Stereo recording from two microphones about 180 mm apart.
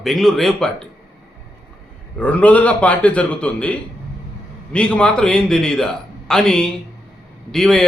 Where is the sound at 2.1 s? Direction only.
5° left (ahead or behind).